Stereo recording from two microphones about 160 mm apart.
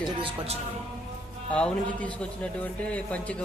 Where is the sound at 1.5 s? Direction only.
10° left (ahead or behind).